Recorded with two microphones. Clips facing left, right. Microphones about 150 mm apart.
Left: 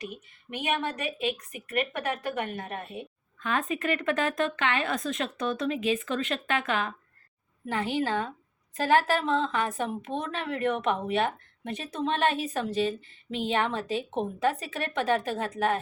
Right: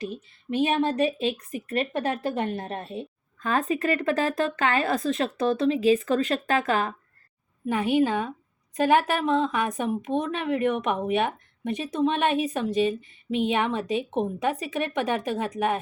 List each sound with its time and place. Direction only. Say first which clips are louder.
0.0 s a woman's voice: right 6 dB; 30° right (ahead or behind)
7.7 s a woman's voice: right 6 dB; 15° right (ahead or behind)